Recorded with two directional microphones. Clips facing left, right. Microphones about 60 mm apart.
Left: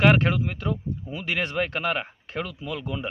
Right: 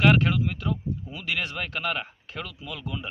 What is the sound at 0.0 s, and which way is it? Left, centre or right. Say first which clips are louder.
Speech: left 1 dB; left.